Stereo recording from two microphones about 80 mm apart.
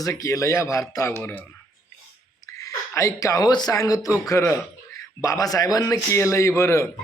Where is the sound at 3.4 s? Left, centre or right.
Left.